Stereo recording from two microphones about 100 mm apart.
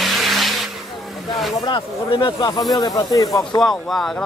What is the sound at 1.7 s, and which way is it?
Speech, 50° left (ahead or behind).